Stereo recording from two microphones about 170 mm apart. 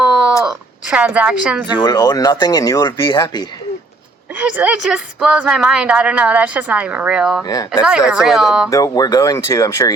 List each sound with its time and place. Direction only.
0.0 s a sound: 5° right (ahead or behind)
1.7 s speech: 25° left (ahead or behind)
4.4 s a woman's voice: 10° right (ahead or behind)
7.4 s speech: 20° left (ahead or behind)
7.9 s speech: 5° right (ahead or behind)
8.7 s speech: 20° left (ahead or behind)